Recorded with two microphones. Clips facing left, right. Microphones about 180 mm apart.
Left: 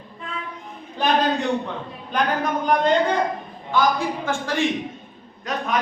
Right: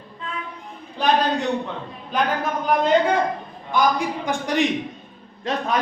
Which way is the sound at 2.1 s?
5° right (ahead or behind).